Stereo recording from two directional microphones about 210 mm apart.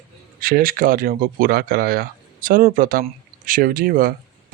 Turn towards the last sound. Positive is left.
turn(degrees=-45)  # may be behind; listen again after turning